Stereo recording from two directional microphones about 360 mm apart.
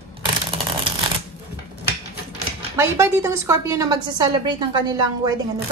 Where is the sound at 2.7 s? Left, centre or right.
Centre.